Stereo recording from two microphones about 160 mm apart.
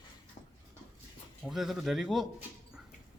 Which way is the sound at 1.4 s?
Centre (ahead or behind).